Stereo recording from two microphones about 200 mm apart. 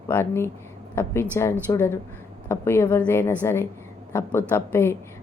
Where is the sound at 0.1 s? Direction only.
10° left (ahead or behind).